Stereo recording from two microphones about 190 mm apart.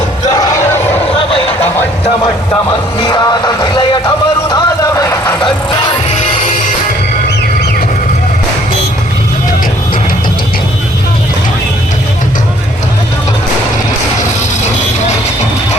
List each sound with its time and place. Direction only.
0.3 s battle cry: 20° left (ahead or behind)
2.5 s music: 20° left (ahead or behind)
6.1 s music: 40° left (ahead or behind)